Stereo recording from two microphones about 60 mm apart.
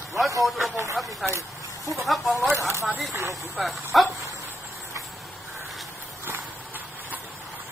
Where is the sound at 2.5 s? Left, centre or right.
Right.